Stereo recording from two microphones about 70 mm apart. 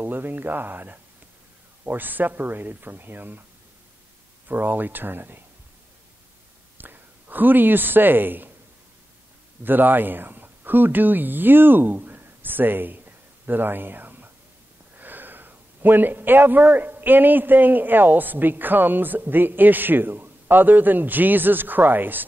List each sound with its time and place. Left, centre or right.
0.0 s a man's voice: right
4.5 s a man's voice: right
6.8 s speech: right
9.6 s a man's voice: right